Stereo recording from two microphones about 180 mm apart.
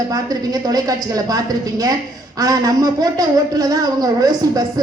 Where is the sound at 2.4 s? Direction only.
20° right (ahead or behind).